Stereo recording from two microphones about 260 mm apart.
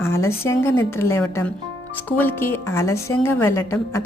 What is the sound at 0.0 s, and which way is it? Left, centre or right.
A woman's voice, centre.